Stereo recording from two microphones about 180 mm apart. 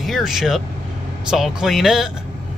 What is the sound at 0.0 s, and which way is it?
Speech, centre (ahead or behind).